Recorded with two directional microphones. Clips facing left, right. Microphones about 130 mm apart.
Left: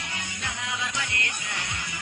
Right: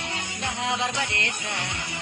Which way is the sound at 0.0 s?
25° right (ahead or behind).